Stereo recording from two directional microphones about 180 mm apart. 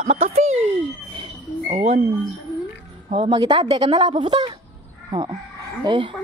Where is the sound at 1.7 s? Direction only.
35° right (ahead or behind).